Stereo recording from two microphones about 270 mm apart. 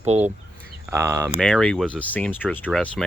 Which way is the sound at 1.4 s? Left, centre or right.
Centre.